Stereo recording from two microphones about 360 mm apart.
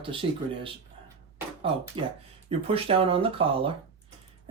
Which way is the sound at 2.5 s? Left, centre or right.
Centre.